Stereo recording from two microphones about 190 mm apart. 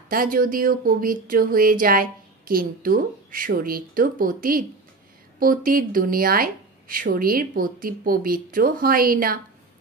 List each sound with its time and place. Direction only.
0.1 s speech: 50° right (ahead or behind)